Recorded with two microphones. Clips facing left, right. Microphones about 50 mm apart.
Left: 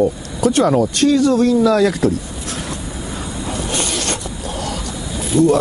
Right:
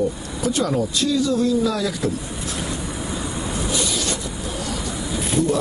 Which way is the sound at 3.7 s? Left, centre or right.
Left.